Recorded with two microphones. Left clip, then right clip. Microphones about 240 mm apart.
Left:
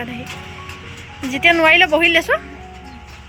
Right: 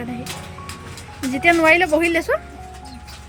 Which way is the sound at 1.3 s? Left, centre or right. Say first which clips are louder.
Left 3 dB; centre.